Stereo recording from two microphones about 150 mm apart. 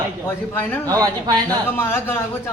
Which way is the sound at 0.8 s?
25° right (ahead or behind).